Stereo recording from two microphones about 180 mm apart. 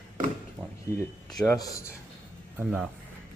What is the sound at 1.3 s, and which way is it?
Speech, 20° left (ahead or behind).